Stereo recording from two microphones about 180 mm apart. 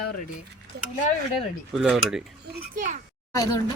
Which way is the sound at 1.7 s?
Centre (ahead or behind).